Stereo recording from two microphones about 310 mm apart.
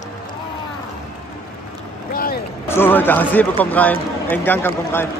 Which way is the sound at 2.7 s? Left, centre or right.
Centre.